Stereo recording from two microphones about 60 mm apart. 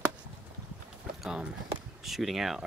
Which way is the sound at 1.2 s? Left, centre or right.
Centre.